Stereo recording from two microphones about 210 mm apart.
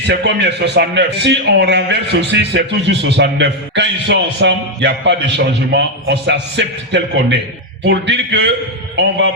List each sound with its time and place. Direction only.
0.1 s a man's voice: 55° right (ahead or behind)